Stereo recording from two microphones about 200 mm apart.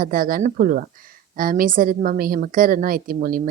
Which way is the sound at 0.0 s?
45° right (ahead or behind).